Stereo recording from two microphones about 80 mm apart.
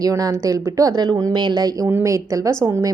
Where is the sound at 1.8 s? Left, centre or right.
Right.